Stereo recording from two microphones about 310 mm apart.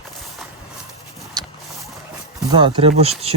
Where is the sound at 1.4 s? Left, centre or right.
Centre.